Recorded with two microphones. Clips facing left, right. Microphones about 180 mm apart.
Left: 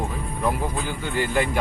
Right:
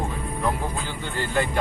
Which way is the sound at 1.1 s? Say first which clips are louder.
Left 2 dB; 15° left (ahead or behind).